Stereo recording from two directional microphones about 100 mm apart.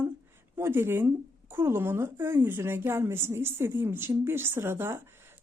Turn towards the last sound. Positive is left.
turn(degrees=-25)  # may be behind; listen again after turning